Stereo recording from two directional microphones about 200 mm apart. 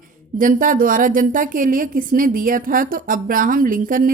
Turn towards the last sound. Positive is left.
turn(degrees=-45)  # may be behind; listen again after turning